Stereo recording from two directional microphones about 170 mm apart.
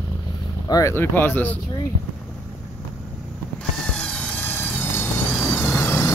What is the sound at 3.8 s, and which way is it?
Vehicle, 5° left (ahead or behind).